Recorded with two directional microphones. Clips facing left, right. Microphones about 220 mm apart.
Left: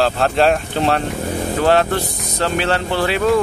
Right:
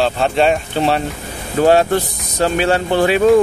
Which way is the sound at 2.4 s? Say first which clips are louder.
Right 4 dB; 15° right (ahead or behind).